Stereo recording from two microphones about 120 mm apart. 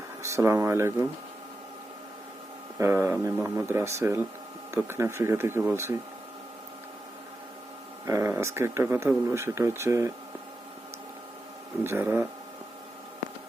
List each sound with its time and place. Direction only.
0.2 s speech: 25° right (ahead or behind)
2.7 s speech: 20° right (ahead or behind)
8.0 s speech: 25° right (ahead or behind)
11.8 s speech: 20° right (ahead or behind)